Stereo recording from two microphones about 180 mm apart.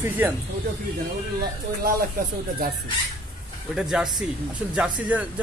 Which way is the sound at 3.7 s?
5° right (ahead or behind).